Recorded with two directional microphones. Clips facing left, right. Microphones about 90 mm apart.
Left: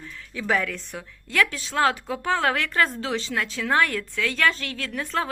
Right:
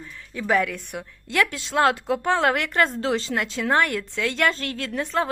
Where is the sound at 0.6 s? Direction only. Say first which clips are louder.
Right 3 dB; 15° right (ahead or behind).